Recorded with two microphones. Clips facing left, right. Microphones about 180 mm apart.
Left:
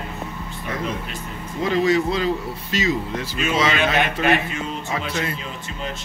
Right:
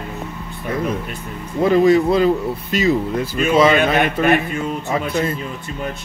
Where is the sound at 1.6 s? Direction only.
55° right (ahead or behind).